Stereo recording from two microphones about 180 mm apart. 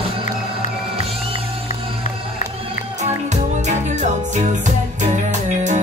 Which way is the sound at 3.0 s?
40° right (ahead or behind).